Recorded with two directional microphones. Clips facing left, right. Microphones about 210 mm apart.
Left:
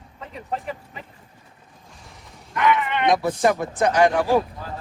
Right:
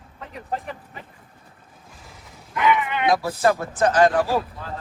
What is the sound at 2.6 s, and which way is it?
Speech, 5° right (ahead or behind).